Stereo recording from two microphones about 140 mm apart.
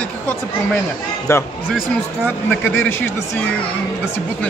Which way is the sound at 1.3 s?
20° left (ahead or behind).